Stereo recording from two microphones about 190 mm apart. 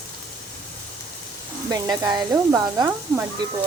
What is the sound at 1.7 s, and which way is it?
Sizzle, 20° right (ahead or behind).